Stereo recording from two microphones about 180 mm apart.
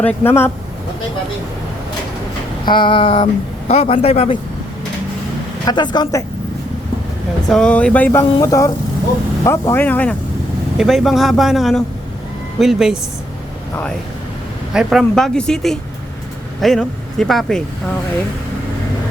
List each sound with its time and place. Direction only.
0.0 s speech: 10° left (ahead or behind)
2.6 s a sound: 25° left (ahead or behind)
3.7 s a man's voice: 35° left (ahead or behind)
5.6 s a sound: 25° left (ahead or behind)
7.4 s speech: 5° left (ahead or behind)
14.7 s speech: 5° right (ahead or behind)